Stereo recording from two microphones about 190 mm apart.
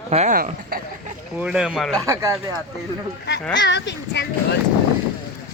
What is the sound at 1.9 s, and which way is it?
Speech, 15° right (ahead or behind).